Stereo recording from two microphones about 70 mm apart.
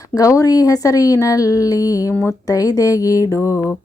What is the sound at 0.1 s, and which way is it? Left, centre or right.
Speech, left.